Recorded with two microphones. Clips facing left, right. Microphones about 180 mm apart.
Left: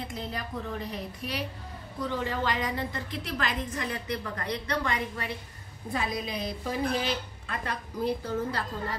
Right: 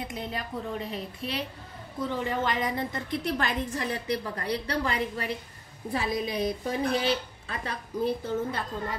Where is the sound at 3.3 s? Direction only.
30° right (ahead or behind).